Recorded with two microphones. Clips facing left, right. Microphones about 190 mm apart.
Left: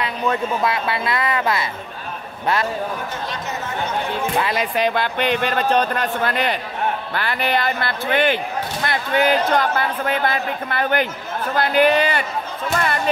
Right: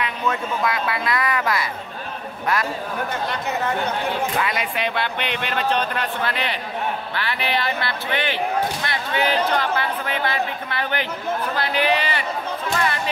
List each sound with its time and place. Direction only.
0.0 s a woman's voice: 30° left (ahead or behind)
4.4 s speech: 35° left (ahead or behind)
12.7 s music: 45° left (ahead or behind)